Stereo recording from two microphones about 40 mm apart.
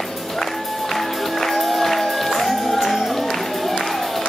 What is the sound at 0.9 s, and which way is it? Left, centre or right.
Music, centre.